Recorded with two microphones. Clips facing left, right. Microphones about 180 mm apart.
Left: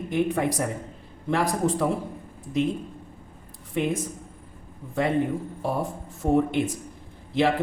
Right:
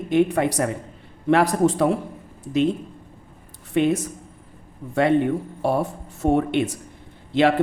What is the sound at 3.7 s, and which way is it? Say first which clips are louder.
Speech: right 6 dB; 75° right (ahead or behind).